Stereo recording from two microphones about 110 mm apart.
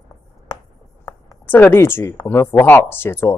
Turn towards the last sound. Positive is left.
turn(degrees=20)  # may be behind; listen again after turning